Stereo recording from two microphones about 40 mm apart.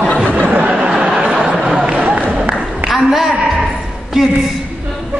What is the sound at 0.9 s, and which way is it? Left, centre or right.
Speech, right.